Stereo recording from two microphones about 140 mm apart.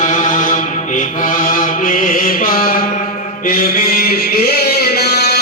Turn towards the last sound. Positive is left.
turn(degrees=90)